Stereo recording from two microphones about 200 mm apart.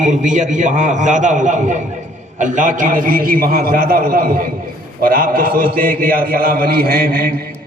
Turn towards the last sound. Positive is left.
turn(degrees=-45)  # may be behind; listen again after turning